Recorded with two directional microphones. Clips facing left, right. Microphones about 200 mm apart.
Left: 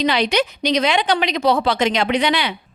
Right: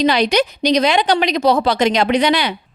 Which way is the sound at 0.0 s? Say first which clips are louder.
Right 3 dB; 40° right (ahead or behind).